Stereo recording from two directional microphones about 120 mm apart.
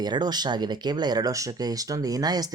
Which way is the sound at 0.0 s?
35° right (ahead or behind).